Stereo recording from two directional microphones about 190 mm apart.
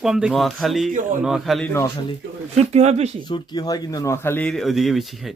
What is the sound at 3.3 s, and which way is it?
Speech, 20° left (ahead or behind).